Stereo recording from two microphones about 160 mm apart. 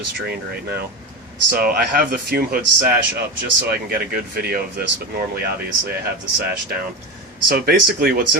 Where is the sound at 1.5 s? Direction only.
65° right (ahead or behind).